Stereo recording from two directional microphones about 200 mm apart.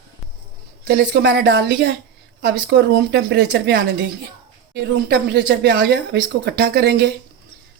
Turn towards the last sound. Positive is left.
turn(degrees=-55)  # may be behind; listen again after turning